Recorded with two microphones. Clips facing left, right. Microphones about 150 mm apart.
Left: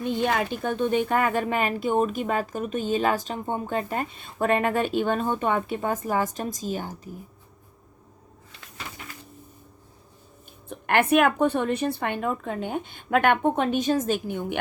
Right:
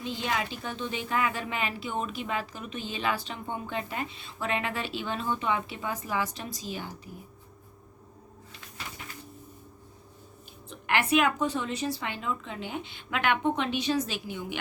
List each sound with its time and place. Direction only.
0.0 s a woman's voice: 55° left (ahead or behind)
10.7 s a woman's voice: 55° left (ahead or behind)